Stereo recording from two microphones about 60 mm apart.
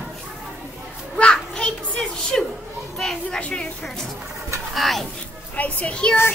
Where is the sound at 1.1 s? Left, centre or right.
Centre.